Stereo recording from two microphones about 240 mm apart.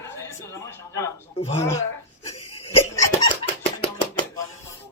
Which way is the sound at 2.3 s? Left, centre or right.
Left.